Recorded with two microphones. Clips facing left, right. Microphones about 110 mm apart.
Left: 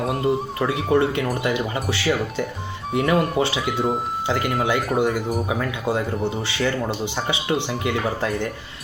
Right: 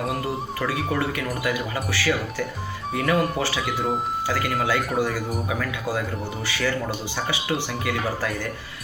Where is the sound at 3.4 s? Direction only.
20° left (ahead or behind).